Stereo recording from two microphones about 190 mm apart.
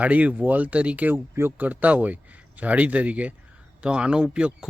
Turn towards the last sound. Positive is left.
turn(degrees=-5)  # may be behind; listen again after turning